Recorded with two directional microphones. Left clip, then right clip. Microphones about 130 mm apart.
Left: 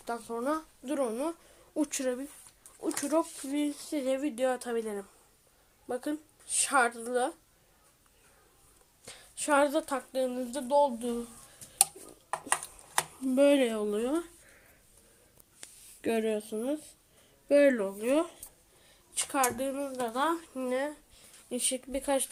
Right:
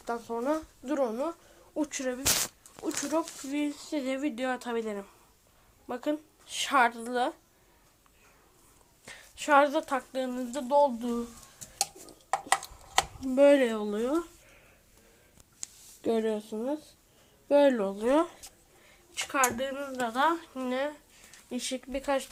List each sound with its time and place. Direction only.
0.0 s speech: 5° left (ahead or behind)
1.7 s speech: 40° left (ahead or behind)
2.8 s speech: 25° left (ahead or behind); by 7.3 s 5° left (ahead or behind)
9.0 s speech: 20° left (ahead or behind)
12.0 s a sound: 30° left (ahead or behind)
16.0 s speech: 25° left (ahead or behind)
18.0 s speech: 5° left (ahead or behind)
19.1 s speech: 20° left (ahead or behind)